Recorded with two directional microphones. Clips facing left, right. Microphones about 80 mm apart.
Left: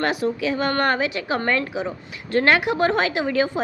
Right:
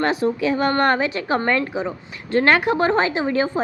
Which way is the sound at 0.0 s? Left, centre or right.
Right.